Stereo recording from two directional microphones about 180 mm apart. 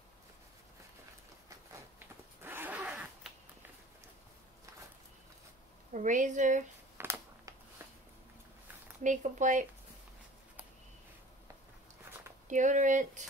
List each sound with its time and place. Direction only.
2.0 s zipper: 10° right (ahead or behind)
5.9 s speech: 45° right (ahead or behind)
7.0 s computer keyboard: 15° right (ahead or behind)
9.0 s speech: 45° right (ahead or behind)
12.4 s speech: 45° right (ahead or behind)